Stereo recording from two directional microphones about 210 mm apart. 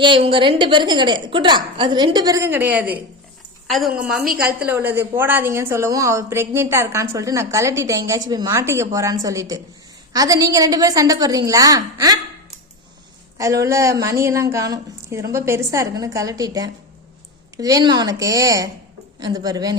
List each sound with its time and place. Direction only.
0.0 s a woman's voice: 25° right (ahead or behind)
13.4 s a woman's voice: 15° right (ahead or behind)